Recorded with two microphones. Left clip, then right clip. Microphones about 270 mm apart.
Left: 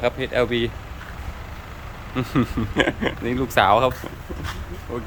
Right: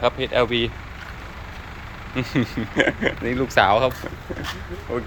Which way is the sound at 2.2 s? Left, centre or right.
Centre.